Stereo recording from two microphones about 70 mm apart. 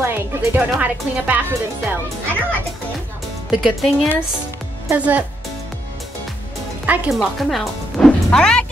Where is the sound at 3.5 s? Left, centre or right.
Centre.